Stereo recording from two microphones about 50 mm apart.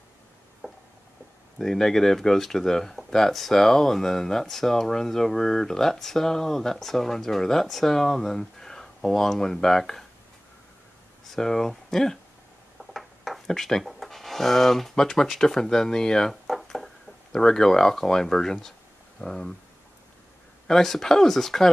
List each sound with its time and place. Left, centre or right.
0.6 s a sound: centre
1.6 s speech: centre
11.2 s speech: centre
20.6 s speech: centre